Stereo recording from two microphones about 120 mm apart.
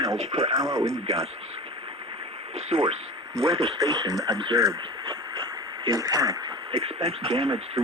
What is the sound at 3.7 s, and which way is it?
Speech, 30° right (ahead or behind).